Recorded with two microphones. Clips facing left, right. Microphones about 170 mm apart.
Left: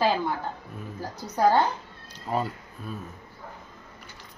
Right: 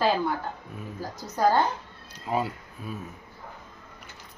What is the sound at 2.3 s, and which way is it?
Speech, 5° right (ahead or behind).